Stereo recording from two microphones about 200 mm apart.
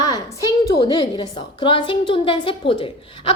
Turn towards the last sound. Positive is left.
turn(degrees=25)  # may be behind; listen again after turning